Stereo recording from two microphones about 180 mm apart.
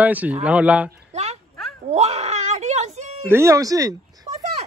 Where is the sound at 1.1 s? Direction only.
35° right (ahead or behind).